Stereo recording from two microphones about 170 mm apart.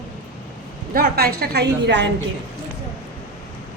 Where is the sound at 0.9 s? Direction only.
60° right (ahead or behind); by 2.1 s 90° right.